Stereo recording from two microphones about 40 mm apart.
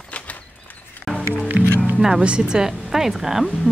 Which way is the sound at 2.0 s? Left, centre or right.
Centre.